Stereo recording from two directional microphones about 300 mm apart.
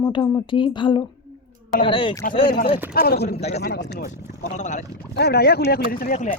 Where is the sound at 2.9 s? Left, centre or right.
Left.